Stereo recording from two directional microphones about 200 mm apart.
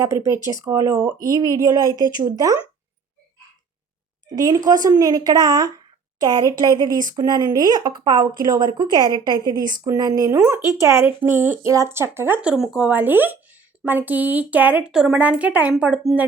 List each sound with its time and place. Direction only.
0.0 s a woman's voice: 15° right (ahead or behind)
4.4 s a woman's voice: 20° right (ahead or behind)